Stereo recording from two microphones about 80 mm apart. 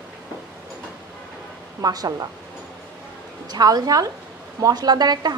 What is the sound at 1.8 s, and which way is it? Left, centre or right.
Speech, right.